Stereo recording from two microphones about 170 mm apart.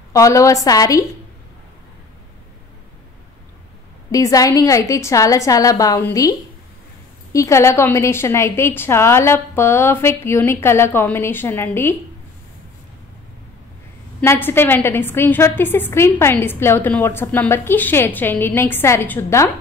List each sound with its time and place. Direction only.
0.1 s a woman's voice: 20° left (ahead or behind)
4.1 s a woman's voice: 20° left (ahead or behind)
7.3 s a woman's voice: 15° left (ahead or behind)
14.2 s a woman's voice: 15° left (ahead or behind)